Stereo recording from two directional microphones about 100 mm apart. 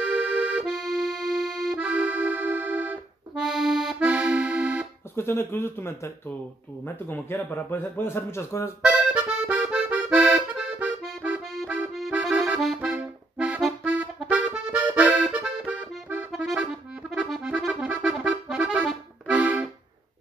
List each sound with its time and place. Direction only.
0.0 s accordion: 15° right (ahead or behind)
1.8 s accordion: 15° right (ahead or behind)
3.3 s accordion: 5° right (ahead or behind)
4.0 s accordion: 15° right (ahead or behind)
5.1 s a man's voice: 25° left (ahead or behind)
8.8 s accordion: 15° right (ahead or behind)
12.5 s accordion: centre (ahead or behind)
12.9 s music: 15° right (ahead or behind)
14.3 s accordion: 10° right (ahead or behind)
16.3 s accordion: 5° right (ahead or behind)